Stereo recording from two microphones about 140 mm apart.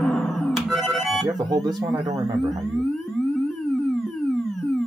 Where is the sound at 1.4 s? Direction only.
30° right (ahead or behind).